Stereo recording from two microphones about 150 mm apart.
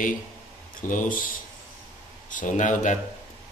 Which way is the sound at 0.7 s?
60° left (ahead or behind).